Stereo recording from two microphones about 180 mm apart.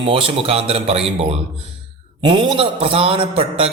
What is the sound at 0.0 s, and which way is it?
A man's voice, 30° right (ahead or behind).